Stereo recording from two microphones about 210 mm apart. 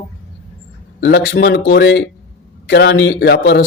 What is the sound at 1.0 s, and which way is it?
Speech, 60° left (ahead or behind).